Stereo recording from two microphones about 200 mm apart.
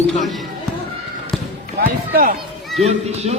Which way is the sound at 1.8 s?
45° right (ahead or behind).